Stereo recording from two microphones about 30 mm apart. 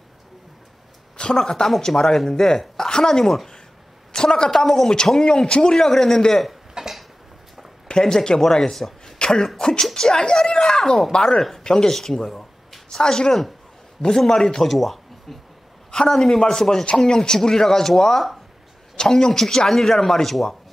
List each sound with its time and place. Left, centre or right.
1.1 s a sound: left
1.4 s speech: centre
3.1 s a man's voice: centre
4.5 s speech: centre; by 5.8 s left
5.8 s speech: centre
6.8 s a sound: right
8.0 s speech: centre
9.2 s speech: left
11.9 s a sound: centre
13.0 s speech: left
14.7 s speech: centre
15.9 s speech: left